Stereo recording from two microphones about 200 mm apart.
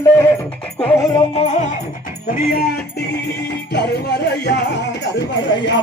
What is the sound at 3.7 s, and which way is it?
Speech, 55° left (ahead or behind).